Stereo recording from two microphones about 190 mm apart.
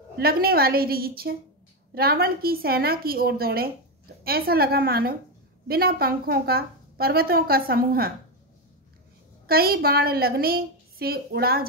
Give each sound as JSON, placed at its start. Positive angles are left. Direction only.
{"t": 0.2, "sound": "a woman's voice", "side_deg": -50}
{"t": 9.5, "sound": "a woman's voice", "side_deg": -50}